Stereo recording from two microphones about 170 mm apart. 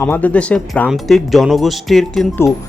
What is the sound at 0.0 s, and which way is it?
Speech, 10° left (ahead or behind).